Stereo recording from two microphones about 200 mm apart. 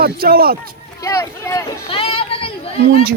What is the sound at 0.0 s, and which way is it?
Speech, 50° right (ahead or behind).